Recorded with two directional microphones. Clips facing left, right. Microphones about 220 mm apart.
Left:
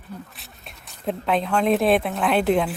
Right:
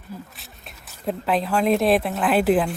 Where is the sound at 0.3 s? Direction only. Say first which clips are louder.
Even; centre (ahead or behind).